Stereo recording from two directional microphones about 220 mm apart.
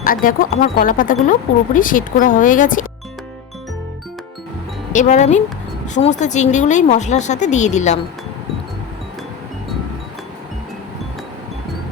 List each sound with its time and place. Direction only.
0.0 s speech: 40° left (ahead or behind)
4.9 s speech: 35° left (ahead or behind)